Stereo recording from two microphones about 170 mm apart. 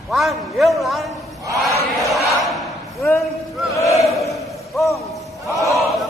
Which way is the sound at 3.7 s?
20° left (ahead or behind).